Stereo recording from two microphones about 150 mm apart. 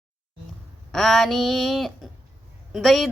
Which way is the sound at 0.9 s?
Centre (ahead or behind).